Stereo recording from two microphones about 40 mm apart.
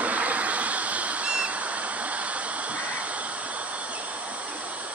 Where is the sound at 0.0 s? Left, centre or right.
Right.